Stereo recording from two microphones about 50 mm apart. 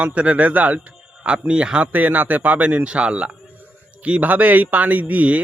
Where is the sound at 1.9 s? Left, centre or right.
Right.